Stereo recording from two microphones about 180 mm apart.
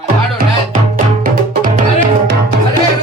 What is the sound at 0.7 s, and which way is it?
Music, 45° right (ahead or behind).